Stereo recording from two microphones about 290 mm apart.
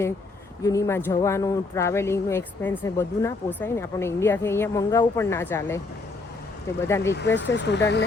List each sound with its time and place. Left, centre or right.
0.6 s speech: centre
6.8 s speech: centre
7.1 s speech: left